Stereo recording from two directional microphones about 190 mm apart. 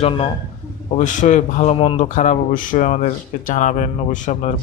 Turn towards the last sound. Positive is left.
turn(degrees=40)  # may be behind; listen again after turning